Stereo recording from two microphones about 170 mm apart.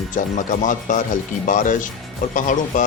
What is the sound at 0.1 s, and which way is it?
Speech, 50° left (ahead or behind).